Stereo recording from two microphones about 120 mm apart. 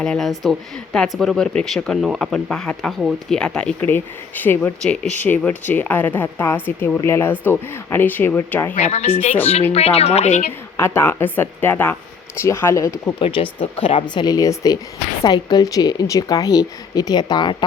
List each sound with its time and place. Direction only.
0.0 s a woman's voice: 5° left (ahead or behind)
8.7 s a woman's voice: 70° left (ahead or behind)
10.8 s speech: 20° left (ahead or behind)
13.1 s a woman's voice: 45° left (ahead or behind)